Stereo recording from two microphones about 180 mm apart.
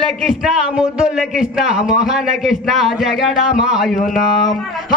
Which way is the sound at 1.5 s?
5° right (ahead or behind).